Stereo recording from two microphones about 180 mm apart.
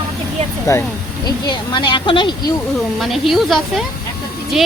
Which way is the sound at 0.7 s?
15° left (ahead or behind).